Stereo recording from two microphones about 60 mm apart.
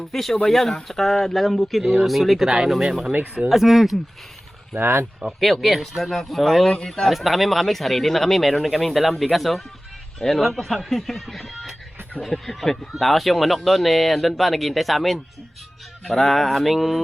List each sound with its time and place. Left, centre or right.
0.1 s speech: centre
3.1 s speech: right
3.5 s speech: centre
4.7 s speech: right
5.4 s speech: centre
7.1 s speech: centre